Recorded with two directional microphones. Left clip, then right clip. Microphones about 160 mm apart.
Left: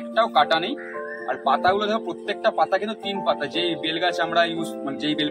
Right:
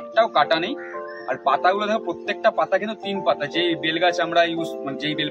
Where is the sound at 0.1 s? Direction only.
20° right (ahead or behind).